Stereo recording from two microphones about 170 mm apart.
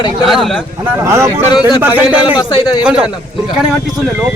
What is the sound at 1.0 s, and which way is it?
A man's voice, 15° right (ahead or behind).